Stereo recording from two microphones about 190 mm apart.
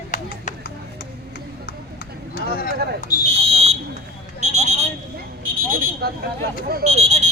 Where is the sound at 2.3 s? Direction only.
50° left (ahead or behind).